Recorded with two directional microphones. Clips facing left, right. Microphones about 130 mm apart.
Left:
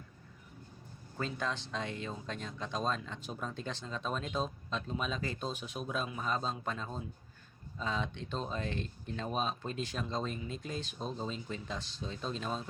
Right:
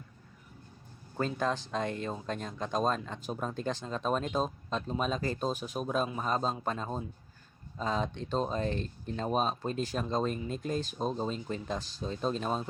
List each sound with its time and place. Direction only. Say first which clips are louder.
1.2 s speech: right 6 dB; 45° right (ahead or behind)